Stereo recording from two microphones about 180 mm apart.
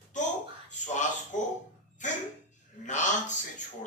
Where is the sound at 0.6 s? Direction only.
40° left (ahead or behind).